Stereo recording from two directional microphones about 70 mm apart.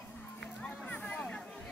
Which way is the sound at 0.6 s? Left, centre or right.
Centre.